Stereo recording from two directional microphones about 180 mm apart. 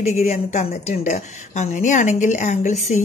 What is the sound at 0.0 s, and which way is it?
A woman's voice, 35° left (ahead or behind).